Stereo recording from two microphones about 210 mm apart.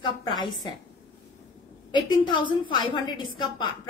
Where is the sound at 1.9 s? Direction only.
20° left (ahead or behind).